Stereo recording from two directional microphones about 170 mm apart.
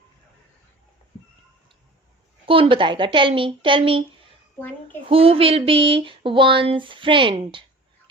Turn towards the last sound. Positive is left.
turn(degrees=-30)  # may be behind; listen again after turning